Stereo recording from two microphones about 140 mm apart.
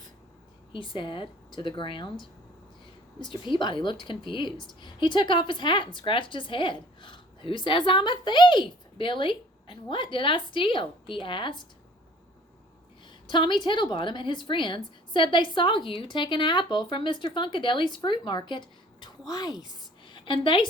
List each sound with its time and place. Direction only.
0.7 s a woman's voice: 35° left (ahead or behind)
13.2 s a woman's voice: 35° left (ahead or behind)